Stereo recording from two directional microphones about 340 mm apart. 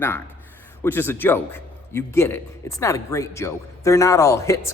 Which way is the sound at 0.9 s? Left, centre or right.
Centre.